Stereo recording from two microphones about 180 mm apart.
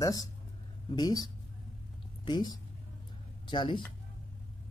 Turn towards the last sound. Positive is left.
turn(degrees=25)  # may be behind; listen again after turning